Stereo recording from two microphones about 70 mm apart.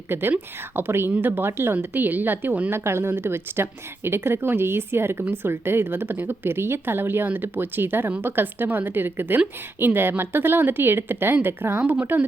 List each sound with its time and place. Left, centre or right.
0.1 s speech: right
11.8 s speech: centre